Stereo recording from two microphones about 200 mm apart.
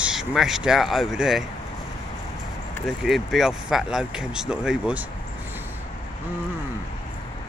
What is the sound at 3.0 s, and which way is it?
Speech, centre (ahead or behind).